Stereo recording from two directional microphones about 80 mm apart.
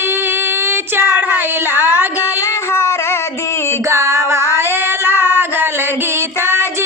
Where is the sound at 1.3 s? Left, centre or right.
Right.